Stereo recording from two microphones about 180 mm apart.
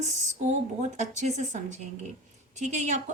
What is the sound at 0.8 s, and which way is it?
Speech, 40° right (ahead or behind).